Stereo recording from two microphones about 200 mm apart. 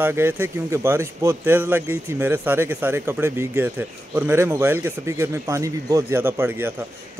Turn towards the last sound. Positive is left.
turn(degrees=-10)  # may be behind; listen again after turning